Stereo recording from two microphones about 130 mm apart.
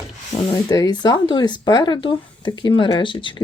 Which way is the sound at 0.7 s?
30° left (ahead or behind).